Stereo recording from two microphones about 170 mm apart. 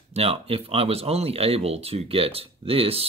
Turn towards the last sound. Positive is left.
turn(degrees=-35)  # may be behind; listen again after turning